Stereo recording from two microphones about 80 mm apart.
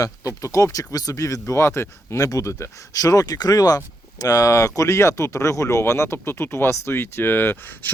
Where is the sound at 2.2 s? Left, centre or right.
Left.